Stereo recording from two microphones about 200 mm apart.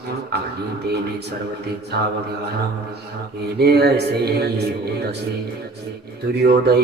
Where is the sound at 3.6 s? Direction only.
55° right (ahead or behind).